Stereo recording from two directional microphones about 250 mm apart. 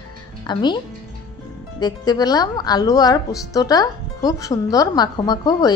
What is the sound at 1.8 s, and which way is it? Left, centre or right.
Speech, centre.